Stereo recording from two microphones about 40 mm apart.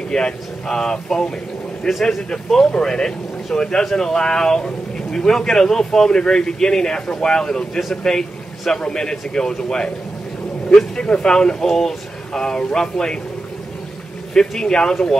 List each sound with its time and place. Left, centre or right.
0.1 s a man's voice: centre
11.2 s speech: left
11.6 s speech: centre
14.5 s speech: centre